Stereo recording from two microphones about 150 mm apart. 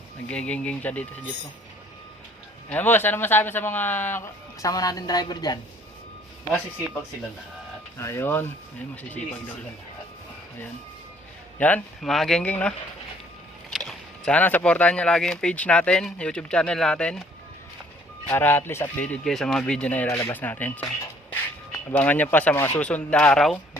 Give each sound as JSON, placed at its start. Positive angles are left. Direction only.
{"t": 0.3, "sound": "speech", "side_deg": 10}
{"t": 2.6, "sound": "speech", "side_deg": 10}
{"t": 7.9, "sound": "speech", "side_deg": 15}
{"t": 11.6, "sound": "speech", "side_deg": 5}
{"t": 18.3, "sound": "speech", "side_deg": 15}